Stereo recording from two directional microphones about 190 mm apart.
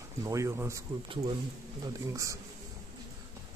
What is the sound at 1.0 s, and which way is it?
Speech, 30° right (ahead or behind).